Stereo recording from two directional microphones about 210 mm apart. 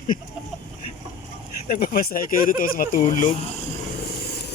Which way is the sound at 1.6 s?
45° left (ahead or behind).